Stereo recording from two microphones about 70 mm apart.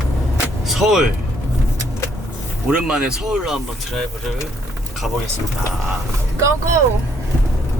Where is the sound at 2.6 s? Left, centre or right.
Centre.